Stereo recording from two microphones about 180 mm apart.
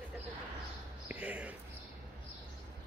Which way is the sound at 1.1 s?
5° right (ahead or behind).